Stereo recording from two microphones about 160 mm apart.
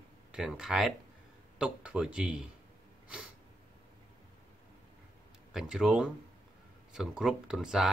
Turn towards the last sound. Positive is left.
turn(degrees=0)  # may be behind; listen again after turning